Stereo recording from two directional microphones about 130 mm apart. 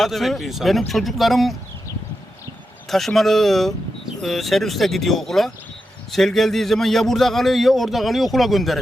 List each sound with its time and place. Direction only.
0.0 s a man's voice: centre (ahead or behind)
2.9 s a man's voice: centre (ahead or behind)